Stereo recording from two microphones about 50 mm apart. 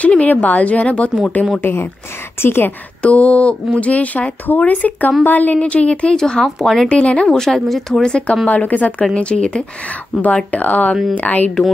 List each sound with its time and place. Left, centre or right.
0.2 s speech: left
1.6 s speech: left
3.0 s speech: left
6.4 s speech: centre
6.9 s speech: left
7.2 s speech: centre
8.0 s speech: centre
8.5 s speech: left
10.2 s speech: left